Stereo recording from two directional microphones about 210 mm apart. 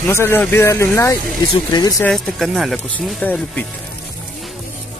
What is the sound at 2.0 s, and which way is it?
Speech, centre (ahead or behind).